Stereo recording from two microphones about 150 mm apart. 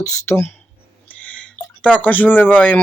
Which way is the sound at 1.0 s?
10° left (ahead or behind).